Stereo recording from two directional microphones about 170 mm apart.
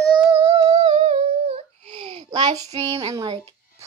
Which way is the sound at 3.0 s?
25° right (ahead or behind).